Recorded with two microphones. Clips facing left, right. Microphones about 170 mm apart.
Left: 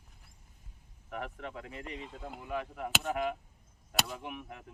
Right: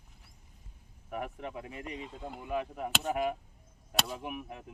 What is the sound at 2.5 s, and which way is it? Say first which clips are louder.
Speech: right 2 dB; 20° right (ahead or behind).